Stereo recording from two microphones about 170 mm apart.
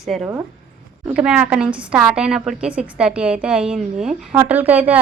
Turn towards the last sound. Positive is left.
turn(degrees=-10)  # may be behind; listen again after turning